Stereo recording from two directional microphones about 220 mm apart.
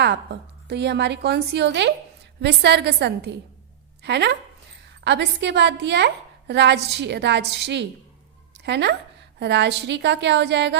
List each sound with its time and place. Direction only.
0.0 s a woman's voice: 50° right (ahead or behind)